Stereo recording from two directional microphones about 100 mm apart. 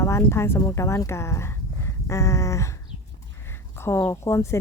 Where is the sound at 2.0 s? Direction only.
30° left (ahead or behind).